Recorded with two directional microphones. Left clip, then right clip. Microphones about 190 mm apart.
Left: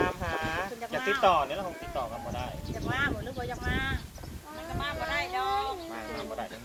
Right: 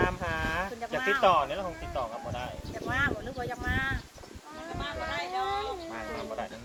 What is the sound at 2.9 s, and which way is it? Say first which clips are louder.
Speech: right 1 dB; 5° left (ahead or behind).